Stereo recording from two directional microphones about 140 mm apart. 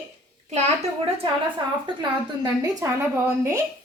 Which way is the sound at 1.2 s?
35° right (ahead or behind).